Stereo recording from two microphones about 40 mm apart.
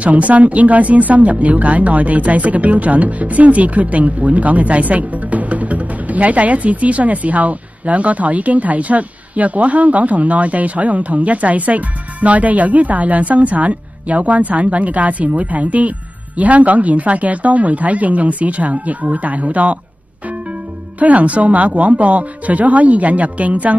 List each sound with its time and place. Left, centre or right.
0.0 s speech: right
21.0 s speech: right